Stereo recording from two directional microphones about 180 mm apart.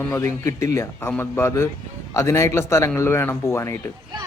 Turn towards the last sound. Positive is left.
turn(degrees=15)  # may be behind; listen again after turning